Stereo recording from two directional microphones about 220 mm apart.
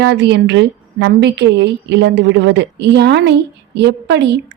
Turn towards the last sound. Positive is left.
turn(degrees=-50)  # may be behind; listen again after turning